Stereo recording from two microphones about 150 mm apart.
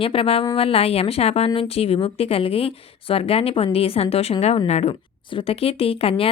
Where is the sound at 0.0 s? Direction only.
40° left (ahead or behind).